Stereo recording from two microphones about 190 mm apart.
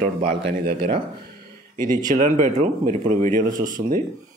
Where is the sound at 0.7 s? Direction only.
45° right (ahead or behind).